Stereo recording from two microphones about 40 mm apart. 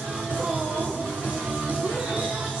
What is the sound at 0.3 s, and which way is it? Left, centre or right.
Music, right.